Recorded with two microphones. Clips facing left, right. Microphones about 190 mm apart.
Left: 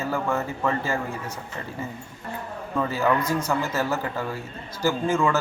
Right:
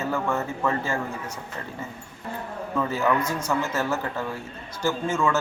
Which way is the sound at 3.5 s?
10° left (ahead or behind).